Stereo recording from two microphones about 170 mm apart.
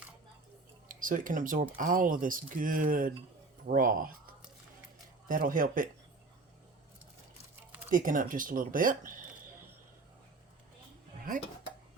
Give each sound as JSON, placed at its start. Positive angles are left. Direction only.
{"t": 0.9, "sound": "speech", "side_deg": -50}
{"t": 7.9, "sound": "speech", "side_deg": -55}